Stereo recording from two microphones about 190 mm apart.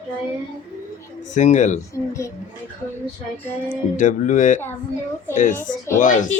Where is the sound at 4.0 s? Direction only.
40° left (ahead or behind).